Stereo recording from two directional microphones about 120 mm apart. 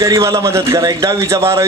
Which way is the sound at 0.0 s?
30° right (ahead or behind).